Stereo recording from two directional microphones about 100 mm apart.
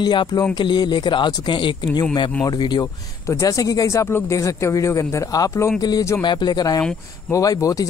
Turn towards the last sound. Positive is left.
turn(degrees=35)  # may be behind; listen again after turning